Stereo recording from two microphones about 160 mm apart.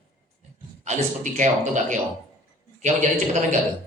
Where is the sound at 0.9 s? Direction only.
50° right (ahead or behind).